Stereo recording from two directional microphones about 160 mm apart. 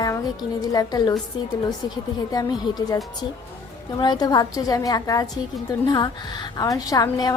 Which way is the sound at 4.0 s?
25° left (ahead or behind).